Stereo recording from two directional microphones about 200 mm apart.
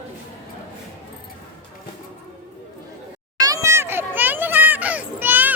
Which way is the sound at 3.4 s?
15° right (ahead or behind).